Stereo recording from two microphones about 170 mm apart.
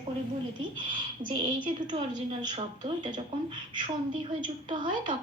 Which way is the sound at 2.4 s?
25° right (ahead or behind).